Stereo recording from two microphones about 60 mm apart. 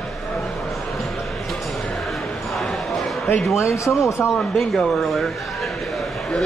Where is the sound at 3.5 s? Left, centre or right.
Left.